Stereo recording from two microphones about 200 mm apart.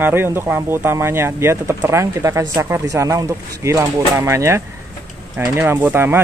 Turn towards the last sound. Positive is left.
turn(degrees=-10)  # may be behind; listen again after turning